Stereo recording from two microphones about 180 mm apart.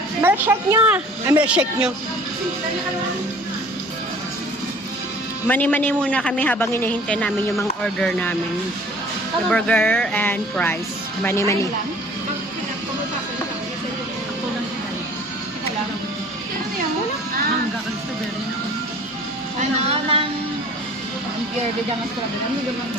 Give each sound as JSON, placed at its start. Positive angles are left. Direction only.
{"t": 0.2, "sound": "a woman's voice", "side_deg": -10}
{"t": 5.5, "sound": "a man's voice", "side_deg": 10}
{"t": 9.5, "sound": "a man's voice", "side_deg": 5}
{"t": 19.5, "sound": "music", "side_deg": -35}